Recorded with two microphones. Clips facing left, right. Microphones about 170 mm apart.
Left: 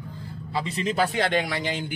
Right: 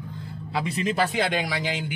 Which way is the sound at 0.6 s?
Centre (ahead or behind).